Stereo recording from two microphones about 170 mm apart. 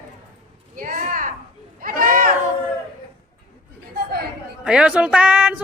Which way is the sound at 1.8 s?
55° right (ahead or behind).